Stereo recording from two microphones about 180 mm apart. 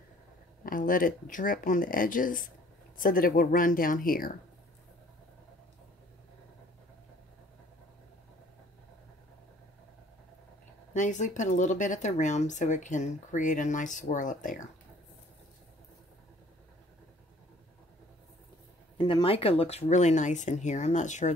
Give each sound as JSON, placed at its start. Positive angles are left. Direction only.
{"t": 0.7, "sound": "speech", "side_deg": 50}
{"t": 10.9, "sound": "speech", "side_deg": 45}
{"t": 18.9, "sound": "speech", "side_deg": 25}